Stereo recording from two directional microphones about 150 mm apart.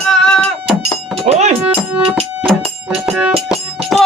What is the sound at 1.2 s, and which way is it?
Music, 50° right (ahead or behind).